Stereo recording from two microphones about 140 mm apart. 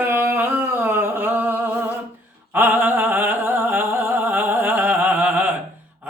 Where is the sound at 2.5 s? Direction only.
15° right (ahead or behind).